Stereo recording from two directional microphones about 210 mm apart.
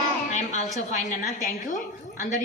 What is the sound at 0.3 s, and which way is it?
A woman's voice, 35° left (ahead or behind).